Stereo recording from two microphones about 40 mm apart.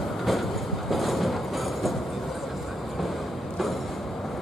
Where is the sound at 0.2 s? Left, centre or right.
Centre.